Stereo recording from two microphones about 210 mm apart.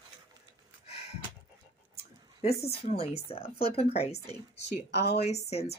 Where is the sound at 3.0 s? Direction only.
30° left (ahead or behind).